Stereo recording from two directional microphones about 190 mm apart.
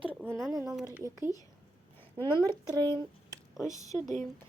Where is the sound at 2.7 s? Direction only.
25° right (ahead or behind).